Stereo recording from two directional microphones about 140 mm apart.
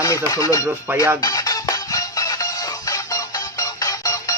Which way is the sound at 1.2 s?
25° left (ahead or behind).